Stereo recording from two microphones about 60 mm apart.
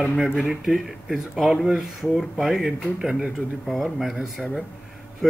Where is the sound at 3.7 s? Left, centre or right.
Centre.